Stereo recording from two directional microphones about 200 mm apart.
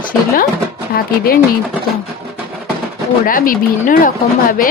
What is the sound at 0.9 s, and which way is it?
Speech, 50° left (ahead or behind).